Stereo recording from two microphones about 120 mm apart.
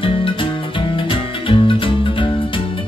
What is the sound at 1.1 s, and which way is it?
Music, 45° left (ahead or behind).